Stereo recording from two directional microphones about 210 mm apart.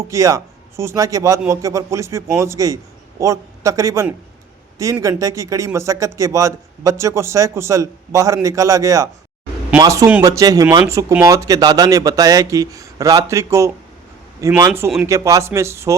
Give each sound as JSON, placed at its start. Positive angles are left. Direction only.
{"t": 0.0, "sound": "a man's voice", "side_deg": -15}